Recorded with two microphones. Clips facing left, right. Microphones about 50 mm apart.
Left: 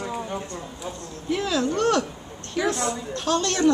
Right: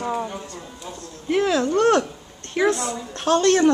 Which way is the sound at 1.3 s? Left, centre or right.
Right.